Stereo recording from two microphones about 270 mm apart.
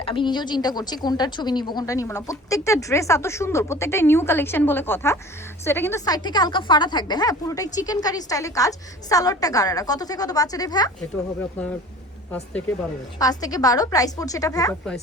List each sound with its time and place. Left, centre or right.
0.0 s a woman's voice: centre
12.3 s a woman's voice: centre